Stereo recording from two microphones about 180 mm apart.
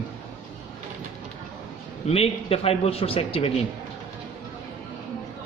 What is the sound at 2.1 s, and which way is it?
A man's voice, 35° left (ahead or behind).